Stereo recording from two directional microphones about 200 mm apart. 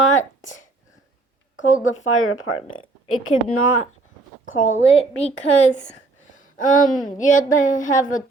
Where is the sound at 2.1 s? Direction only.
90° left.